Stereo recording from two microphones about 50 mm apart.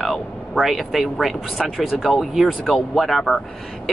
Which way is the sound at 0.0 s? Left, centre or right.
Centre.